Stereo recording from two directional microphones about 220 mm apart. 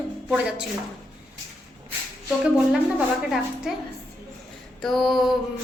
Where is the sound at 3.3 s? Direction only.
Centre (ahead or behind).